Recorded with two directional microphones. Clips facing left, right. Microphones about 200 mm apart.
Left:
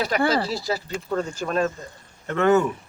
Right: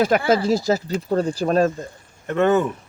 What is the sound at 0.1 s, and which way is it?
Speech, 50° right (ahead or behind).